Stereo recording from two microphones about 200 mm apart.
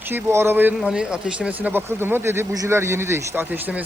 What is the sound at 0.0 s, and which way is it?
Speech, 10° right (ahead or behind).